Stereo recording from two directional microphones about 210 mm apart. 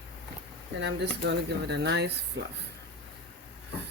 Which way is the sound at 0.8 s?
55° right (ahead or behind).